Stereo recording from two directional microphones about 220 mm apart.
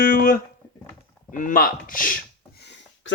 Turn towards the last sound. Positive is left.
turn(degrees=50)  # may be behind; listen again after turning